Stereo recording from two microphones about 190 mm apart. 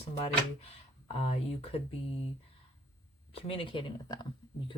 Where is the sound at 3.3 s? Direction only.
30° left (ahead or behind).